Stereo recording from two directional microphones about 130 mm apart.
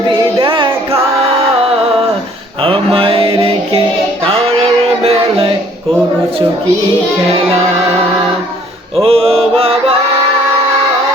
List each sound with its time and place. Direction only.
0.3 s music: 40° right (ahead or behind)
2.6 s mantra: 45° right (ahead or behind)
4.3 s music: 50° right (ahead or behind)
9.0 s mantra: 50° right (ahead or behind)